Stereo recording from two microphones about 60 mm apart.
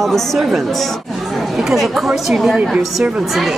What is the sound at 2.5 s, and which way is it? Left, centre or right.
Speech, centre.